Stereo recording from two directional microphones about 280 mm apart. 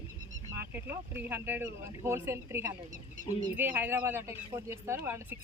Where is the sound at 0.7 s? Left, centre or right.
Centre.